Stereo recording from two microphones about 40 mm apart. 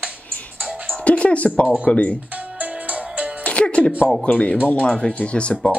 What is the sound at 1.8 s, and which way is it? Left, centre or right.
Speech, left.